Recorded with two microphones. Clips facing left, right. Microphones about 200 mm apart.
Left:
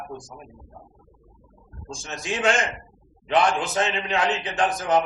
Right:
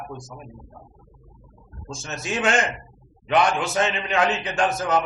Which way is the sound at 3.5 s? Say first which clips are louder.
Right 1 dB; 35° left (ahead or behind).